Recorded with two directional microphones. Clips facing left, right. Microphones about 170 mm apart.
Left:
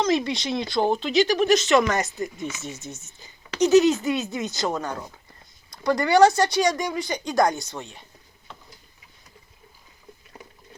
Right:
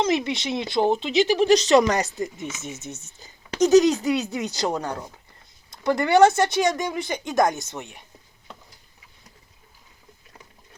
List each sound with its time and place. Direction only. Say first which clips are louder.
0.0 s speech: even; 20° right (ahead or behind)
2.4 s speech: left 1 dB; 20° right (ahead or behind)
3.2 s speech: right 1 dB; 40° right (ahead or behind); by 8.0 s 15° right (ahead or behind)